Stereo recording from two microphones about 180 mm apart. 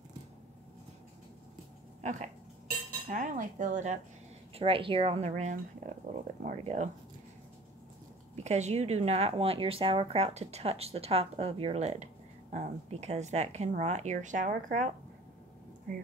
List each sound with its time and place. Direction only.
2.0 s speech: 40° right (ahead or behind)
3.1 s cutlery: 45° right (ahead or behind)
4.6 s speech: 30° right (ahead or behind)
8.5 s speech: 40° right (ahead or behind)